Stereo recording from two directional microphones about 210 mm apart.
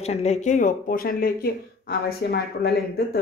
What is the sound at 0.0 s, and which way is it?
Speech, 30° left (ahead or behind).